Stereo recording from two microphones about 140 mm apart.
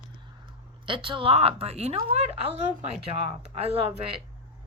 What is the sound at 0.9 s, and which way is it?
A woman's voice, 40° right (ahead or behind).